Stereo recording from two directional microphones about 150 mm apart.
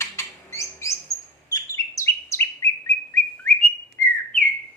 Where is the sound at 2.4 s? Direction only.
15° left (ahead or behind).